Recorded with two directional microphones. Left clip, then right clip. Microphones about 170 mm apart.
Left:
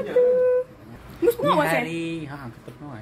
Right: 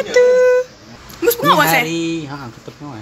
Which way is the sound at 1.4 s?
10° left (ahead or behind).